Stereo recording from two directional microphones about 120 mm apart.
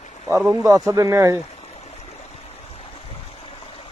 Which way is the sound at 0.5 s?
25° right (ahead or behind).